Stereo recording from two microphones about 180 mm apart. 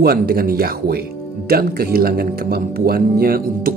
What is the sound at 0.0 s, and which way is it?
Speech, 60° right (ahead or behind).